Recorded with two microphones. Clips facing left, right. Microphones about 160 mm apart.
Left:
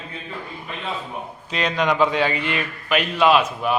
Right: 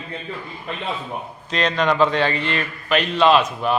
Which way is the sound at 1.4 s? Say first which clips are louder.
Right 2 dB; 10° left (ahead or behind).